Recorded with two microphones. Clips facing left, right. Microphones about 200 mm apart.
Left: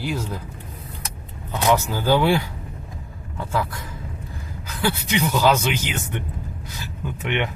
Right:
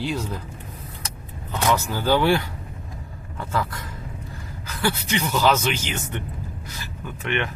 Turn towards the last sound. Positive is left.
turn(degrees=15)  # may be behind; listen again after turning